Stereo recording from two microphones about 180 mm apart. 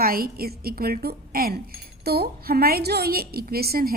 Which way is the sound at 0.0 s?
55° right (ahead or behind).